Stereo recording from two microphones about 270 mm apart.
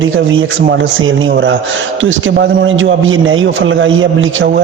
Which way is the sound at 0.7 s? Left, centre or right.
Right.